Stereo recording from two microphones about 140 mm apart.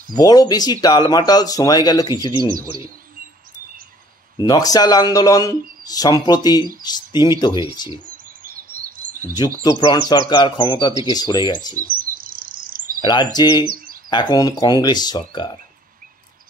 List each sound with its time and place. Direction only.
0.1 s speech: 25° left (ahead or behind)
4.4 s speech: 25° left (ahead or behind)
8.5 s bird vocalization: 90° right
9.6 s speech: 30° left (ahead or behind)
11.7 s chirp: 90° right
13.0 s speech: 30° left (ahead or behind)